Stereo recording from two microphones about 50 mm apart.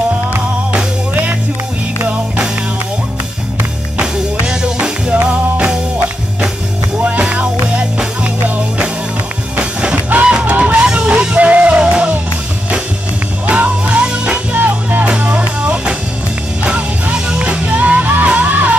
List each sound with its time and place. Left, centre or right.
4.0 s music: centre
5.1 s music: right
7.0 s music: right
9.6 s music: right
13.5 s music: right
15.0 s music: right